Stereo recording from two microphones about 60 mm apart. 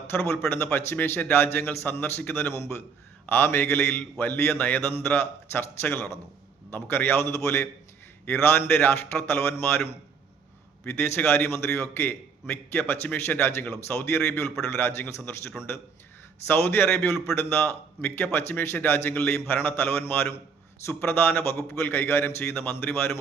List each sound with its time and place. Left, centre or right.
0.1 s a man's voice: left
4.2 s a man's voice: left
8.2 s a man's voice: left